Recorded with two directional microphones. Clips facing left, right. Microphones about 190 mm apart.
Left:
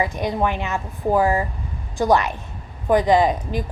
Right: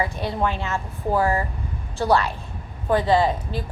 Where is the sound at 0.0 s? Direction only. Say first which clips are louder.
Left 3 dB; 15° left (ahead or behind).